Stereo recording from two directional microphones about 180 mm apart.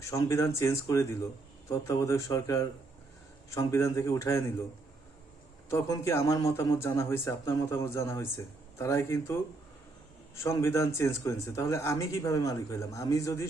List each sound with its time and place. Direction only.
0.0 s speech: 15° left (ahead or behind)
5.7 s speech: 15° left (ahead or behind)